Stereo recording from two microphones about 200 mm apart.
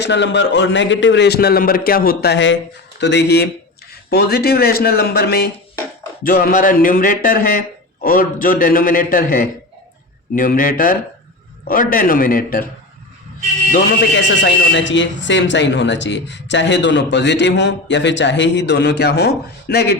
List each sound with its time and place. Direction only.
0.0 s a man's voice: 60° left (ahead or behind); by 12.6 s 45° left (ahead or behind)
13.7 s a man's voice: 40° left (ahead or behind)
14.2 s speech: 65° left (ahead or behind)